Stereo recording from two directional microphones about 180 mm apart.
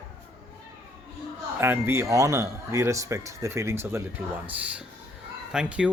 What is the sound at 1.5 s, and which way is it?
Speech, 10° right (ahead or behind).